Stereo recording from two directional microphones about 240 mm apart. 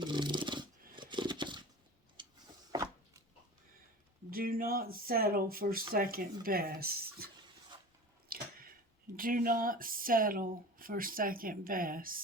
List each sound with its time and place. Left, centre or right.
0.0 s a sound: centre
4.3 s speech: right
8.3 s squish: right
9.1 s speech: right